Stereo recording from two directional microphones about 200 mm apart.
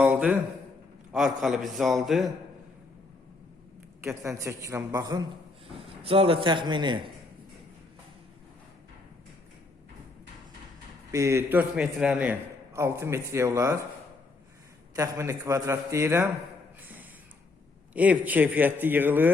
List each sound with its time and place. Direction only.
0.0 s a sound: 5° right (ahead or behind)
1.1 s a man's voice: centre (ahead or behind)
4.2 s a man's voice: 15° right (ahead or behind)
11.1 s a man's voice: 15° right (ahead or behind)
14.9 s a man's voice: 15° right (ahead or behind)
16.8 s a sound: 10° right (ahead or behind)
17.9 s a man's voice: 5° right (ahead or behind)